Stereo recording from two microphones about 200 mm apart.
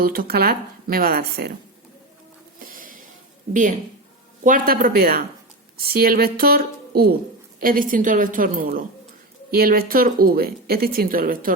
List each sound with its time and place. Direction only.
0.0 s speech: 45° right (ahead or behind)
2.7 s a sound: 45° right (ahead or behind)
3.5 s a woman's voice: 40° right (ahead or behind)